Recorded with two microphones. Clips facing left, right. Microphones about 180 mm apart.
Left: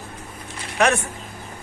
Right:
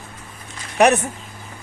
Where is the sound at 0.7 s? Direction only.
15° right (ahead or behind).